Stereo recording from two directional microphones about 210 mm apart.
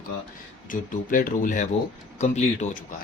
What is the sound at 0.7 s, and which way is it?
Speech, 40° left (ahead or behind).